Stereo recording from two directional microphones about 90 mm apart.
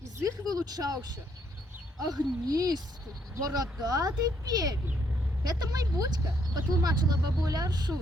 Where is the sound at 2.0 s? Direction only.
45° right (ahead or behind).